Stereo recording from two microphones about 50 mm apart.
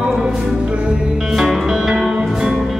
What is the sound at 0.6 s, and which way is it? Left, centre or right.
Music, right.